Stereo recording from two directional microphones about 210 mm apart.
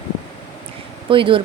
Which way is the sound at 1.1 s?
25° right (ahead or behind).